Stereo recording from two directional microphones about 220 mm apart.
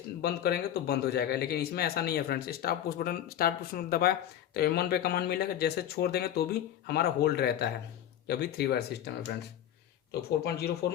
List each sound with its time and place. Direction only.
0.2 s speech: 45° left (ahead or behind)